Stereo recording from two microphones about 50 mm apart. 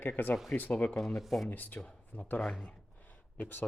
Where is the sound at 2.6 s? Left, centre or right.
Left.